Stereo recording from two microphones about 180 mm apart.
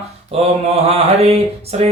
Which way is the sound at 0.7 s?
35° right (ahead or behind).